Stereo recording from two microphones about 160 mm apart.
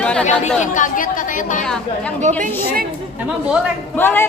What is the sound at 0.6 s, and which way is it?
Speech, 55° left (ahead or behind).